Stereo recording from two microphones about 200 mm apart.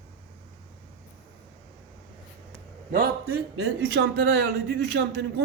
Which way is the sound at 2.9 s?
50° right (ahead or behind).